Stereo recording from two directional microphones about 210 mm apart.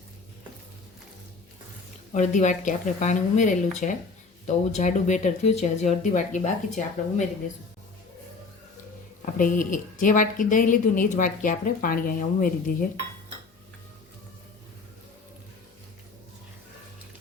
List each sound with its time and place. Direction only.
2.1 s a woman's voice: 35° left (ahead or behind)
9.2 s a woman's voice: 40° left (ahead or behind)